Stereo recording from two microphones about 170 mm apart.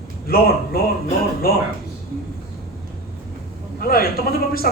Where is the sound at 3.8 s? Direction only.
60° left (ahead or behind).